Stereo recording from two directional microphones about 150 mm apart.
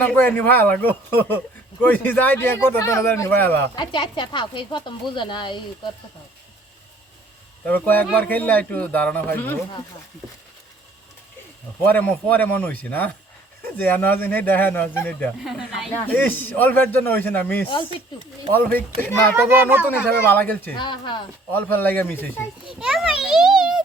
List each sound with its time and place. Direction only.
0.0 s a man's voice: 10° left (ahead or behind)
3.8 s speech: 30° left (ahead or behind)
7.6 s a man's voice: 10° left (ahead or behind)
11.9 s a man's voice: 10° left (ahead or behind)
15.4 s speech: 5° right (ahead or behind)
16.0 s a man's voice: 10° left (ahead or behind)
19.4 s speech: 15° right (ahead or behind)
20.2 s a man's voice: 10° left (ahead or behind)
20.7 s speech: 30° left (ahead or behind)
21.6 s a man's voice: 10° left (ahead or behind)
22.8 s a sound: 5° right (ahead or behind)